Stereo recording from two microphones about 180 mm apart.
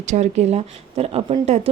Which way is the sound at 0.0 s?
40° right (ahead or behind).